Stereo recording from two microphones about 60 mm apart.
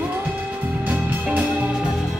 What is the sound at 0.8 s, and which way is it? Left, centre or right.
Music, right.